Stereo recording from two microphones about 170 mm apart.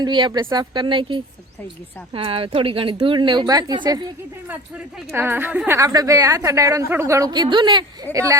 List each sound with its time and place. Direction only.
0.0 s a woman's voice: 25° right (ahead or behind)
5.1 s a woman's voice: 10° right (ahead or behind)